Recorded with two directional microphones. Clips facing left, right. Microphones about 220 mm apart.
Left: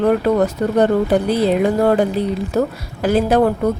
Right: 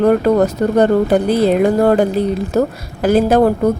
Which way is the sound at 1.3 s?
45° right (ahead or behind).